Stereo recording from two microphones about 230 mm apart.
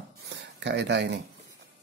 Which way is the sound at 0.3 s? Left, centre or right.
Right.